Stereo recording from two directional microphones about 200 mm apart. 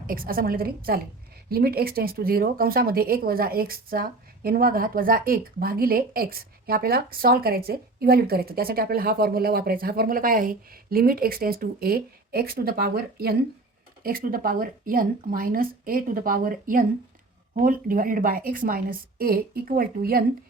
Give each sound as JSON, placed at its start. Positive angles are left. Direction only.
{"t": 0.1, "sound": "speech", "side_deg": -45}